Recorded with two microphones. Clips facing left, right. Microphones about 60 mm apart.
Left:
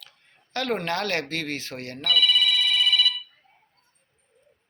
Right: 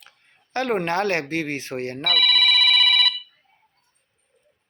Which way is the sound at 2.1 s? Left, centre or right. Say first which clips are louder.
Right 1 dB; right.